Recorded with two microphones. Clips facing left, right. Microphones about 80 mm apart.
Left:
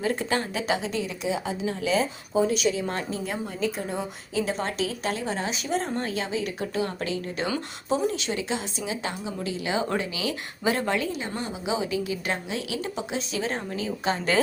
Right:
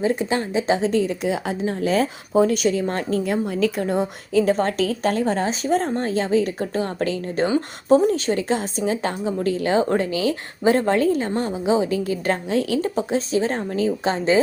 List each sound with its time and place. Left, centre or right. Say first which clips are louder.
0.0 s speech: right 5 dB; right
1.3 s speech: right 4 dB; right
2.6 s a woman's voice: right 5 dB; right
3.2 s a woman's voice: right 8 dB; right